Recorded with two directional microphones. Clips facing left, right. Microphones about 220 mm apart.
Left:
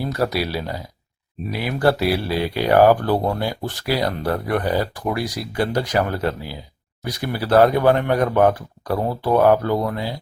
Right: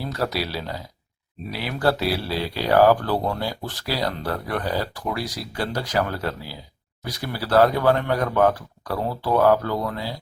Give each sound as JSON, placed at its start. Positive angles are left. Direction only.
{"t": 0.0, "sound": "speech", "side_deg": 15}